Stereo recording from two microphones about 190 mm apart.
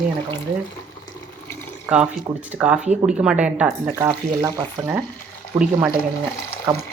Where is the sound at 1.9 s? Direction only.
10° right (ahead or behind).